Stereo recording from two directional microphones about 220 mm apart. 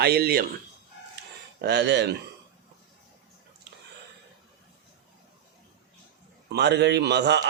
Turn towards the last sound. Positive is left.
turn(degrees=-50)  # may be behind; listen again after turning